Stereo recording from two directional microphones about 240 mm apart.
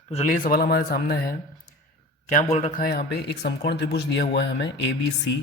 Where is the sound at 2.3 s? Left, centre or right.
Left.